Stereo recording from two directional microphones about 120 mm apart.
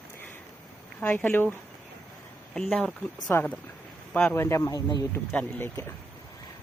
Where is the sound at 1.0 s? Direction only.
15° left (ahead or behind).